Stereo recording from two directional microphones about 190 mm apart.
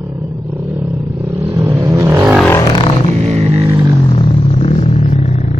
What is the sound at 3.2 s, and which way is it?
Music, 35° right (ahead or behind).